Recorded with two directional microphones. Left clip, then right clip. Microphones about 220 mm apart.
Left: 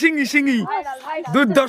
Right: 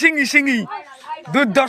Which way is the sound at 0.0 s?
10° left (ahead or behind).